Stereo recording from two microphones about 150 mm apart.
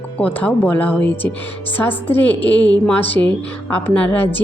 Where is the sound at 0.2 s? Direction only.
10° left (ahead or behind).